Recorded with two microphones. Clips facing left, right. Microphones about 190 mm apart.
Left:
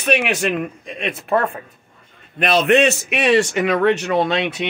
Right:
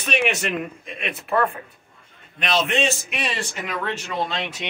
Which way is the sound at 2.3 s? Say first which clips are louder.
Left 8 dB; 60° left (ahead or behind).